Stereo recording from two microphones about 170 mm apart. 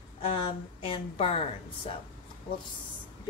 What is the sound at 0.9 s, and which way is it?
Speech, 35° left (ahead or behind).